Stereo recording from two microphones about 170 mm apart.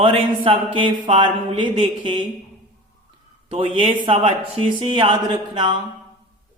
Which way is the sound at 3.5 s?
30° right (ahead or behind).